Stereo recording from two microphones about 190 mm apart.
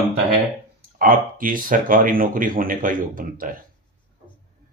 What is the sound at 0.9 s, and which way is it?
Speech, 45° right (ahead or behind).